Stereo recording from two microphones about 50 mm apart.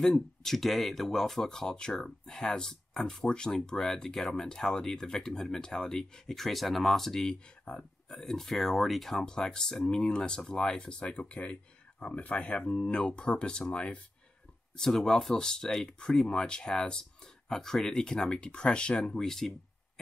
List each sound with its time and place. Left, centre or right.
0.0 s speech: centre
7.7 s speech: left
8.1 s speech: centre
14.8 s speech: centre